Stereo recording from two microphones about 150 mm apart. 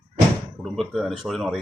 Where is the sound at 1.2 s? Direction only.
Centre (ahead or behind).